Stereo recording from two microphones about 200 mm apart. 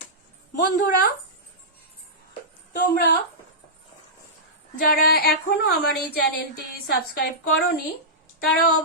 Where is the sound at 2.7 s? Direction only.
55° left (ahead or behind).